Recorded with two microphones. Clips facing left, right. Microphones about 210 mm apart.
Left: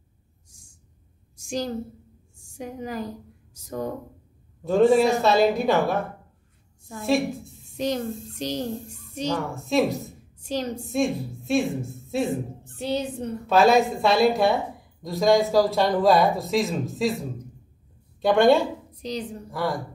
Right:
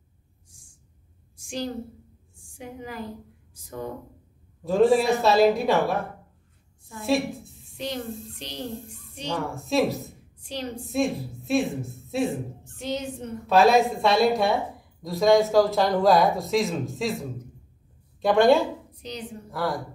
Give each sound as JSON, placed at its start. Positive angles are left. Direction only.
{"t": 1.3, "sound": "a sound", "side_deg": 40}
{"t": 2.3, "sound": "a woman's voice", "side_deg": 40}
{"t": 4.6, "sound": "a woman's voice", "side_deg": 0}
{"t": 7.0, "sound": "a woman's voice", "side_deg": 0}
{"t": 7.7, "sound": "a child's voice", "side_deg": 45}
{"t": 9.3, "sound": "a woman's voice", "side_deg": 0}
{"t": 10.4, "sound": "a woman's voice", "side_deg": 40}
{"t": 10.9, "sound": "a woman's voice", "side_deg": 0}
{"t": 12.7, "sound": "a woman's voice", "side_deg": 35}
{"t": 13.5, "sound": "a woman's voice", "side_deg": 0}